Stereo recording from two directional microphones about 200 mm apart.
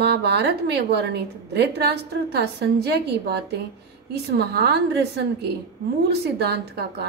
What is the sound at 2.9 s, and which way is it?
A woman's voice, 55° right (ahead or behind).